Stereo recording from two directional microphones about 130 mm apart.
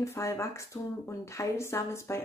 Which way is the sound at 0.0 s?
20° left (ahead or behind).